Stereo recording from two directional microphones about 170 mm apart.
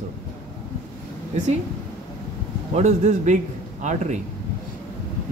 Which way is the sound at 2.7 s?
40° right (ahead or behind).